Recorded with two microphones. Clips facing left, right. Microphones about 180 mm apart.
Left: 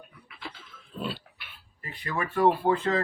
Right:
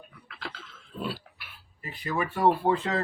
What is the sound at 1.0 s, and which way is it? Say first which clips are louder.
Pig: even; 5° right (ahead or behind).